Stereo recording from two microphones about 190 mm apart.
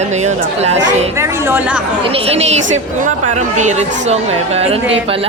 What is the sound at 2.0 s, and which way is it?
A woman's voice, 30° right (ahead or behind).